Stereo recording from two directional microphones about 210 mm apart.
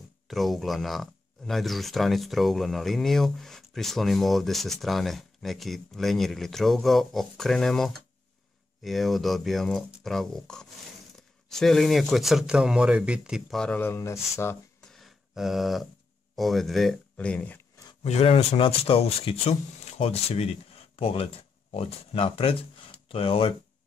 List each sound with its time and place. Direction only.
0.3 s speech: centre (ahead or behind)
14.4 s a sound: 5° left (ahead or behind)
16.3 s speech: centre (ahead or behind)
18.0 s speech: 30° left (ahead or behind)